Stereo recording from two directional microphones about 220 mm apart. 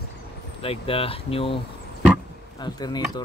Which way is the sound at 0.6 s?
25° left (ahead or behind).